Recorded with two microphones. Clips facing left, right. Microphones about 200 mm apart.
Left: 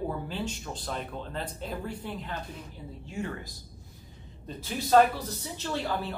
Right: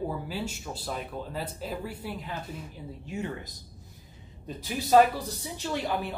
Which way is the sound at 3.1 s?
20° right (ahead or behind).